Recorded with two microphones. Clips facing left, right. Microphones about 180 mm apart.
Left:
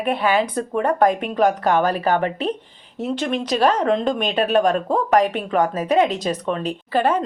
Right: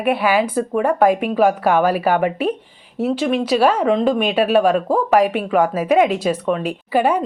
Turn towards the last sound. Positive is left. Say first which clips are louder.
# right 2 dB
turn(degrees=-10)  # may be behind; listen again after turning